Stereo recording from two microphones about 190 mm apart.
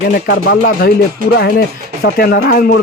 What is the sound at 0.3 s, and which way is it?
A man's voice, 55° left (ahead or behind).